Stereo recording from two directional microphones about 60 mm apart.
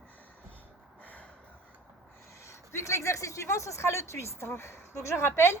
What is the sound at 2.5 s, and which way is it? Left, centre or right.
Speech, left.